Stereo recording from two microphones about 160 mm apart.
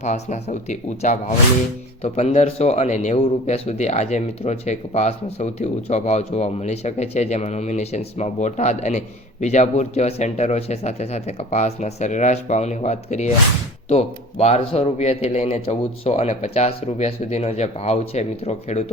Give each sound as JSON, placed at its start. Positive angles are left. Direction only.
{"t": 0.0, "sound": "a man's voice", "side_deg": 45}